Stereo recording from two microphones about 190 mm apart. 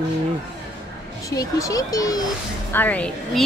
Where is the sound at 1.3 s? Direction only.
15° left (ahead or behind).